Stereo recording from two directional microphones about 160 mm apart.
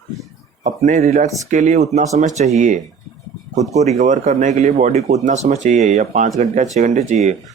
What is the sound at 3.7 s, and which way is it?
Speech, 45° right (ahead or behind).